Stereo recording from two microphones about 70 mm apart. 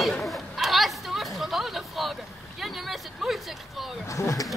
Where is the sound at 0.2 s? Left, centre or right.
Centre.